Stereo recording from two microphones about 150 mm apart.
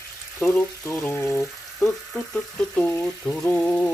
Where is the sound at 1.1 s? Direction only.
15° left (ahead or behind).